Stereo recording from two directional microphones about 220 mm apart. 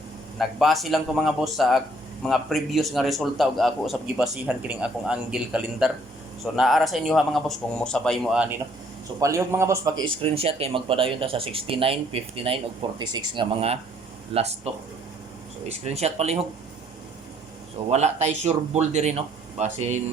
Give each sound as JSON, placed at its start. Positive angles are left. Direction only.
{"t": 0.3, "sound": "a man's voice", "side_deg": 0}
{"t": 15.7, "sound": "speech", "side_deg": -30}
{"t": 17.9, "sound": "speech", "side_deg": -30}